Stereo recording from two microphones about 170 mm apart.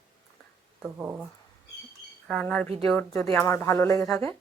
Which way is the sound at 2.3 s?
5° left (ahead or behind).